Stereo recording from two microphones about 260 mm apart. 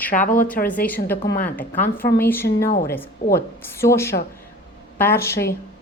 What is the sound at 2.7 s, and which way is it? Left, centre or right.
Speech, left.